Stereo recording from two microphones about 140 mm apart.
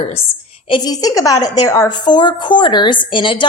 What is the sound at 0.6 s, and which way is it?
A woman's voice, 35° left (ahead or behind).